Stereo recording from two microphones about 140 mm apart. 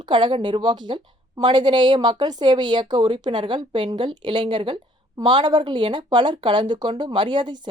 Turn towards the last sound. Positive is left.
turn(degrees=-35)  # may be behind; listen again after turning